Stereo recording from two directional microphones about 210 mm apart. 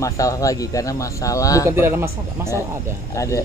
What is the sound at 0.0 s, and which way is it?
Speech, 15° left (ahead or behind).